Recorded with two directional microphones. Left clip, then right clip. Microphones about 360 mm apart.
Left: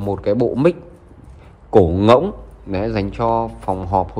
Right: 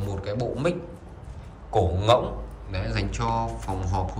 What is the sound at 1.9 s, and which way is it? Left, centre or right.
Speech, centre.